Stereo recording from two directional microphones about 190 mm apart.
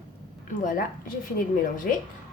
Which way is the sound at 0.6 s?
45° left (ahead or behind).